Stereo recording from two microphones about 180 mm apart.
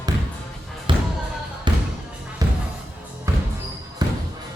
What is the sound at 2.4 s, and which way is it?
Music, 20° right (ahead or behind).